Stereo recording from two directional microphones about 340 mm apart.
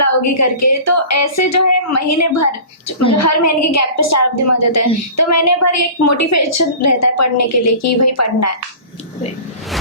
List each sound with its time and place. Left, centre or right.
0.0 s a woman's voice: left